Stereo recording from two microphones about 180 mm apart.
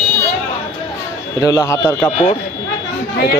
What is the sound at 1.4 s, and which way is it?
Speech, 20° left (ahead or behind).